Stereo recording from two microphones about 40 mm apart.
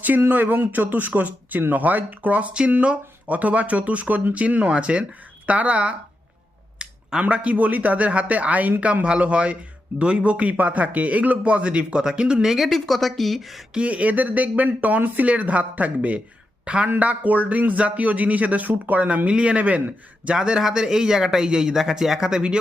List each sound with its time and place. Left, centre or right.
0.3 s speech: right
0.7 s a man's voice: right
12.5 s speech: centre
13.7 s speech: right
20.3 s speech: centre